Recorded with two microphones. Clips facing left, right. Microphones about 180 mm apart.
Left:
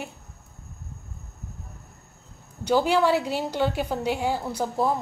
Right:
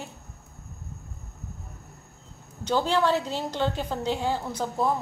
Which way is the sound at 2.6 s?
10° left (ahead or behind).